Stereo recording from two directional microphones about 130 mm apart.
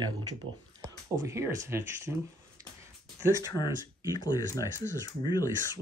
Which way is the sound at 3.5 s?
30° left (ahead or behind).